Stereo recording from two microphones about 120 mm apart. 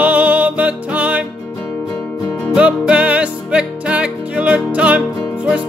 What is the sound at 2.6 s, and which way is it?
Music, 10° right (ahead or behind).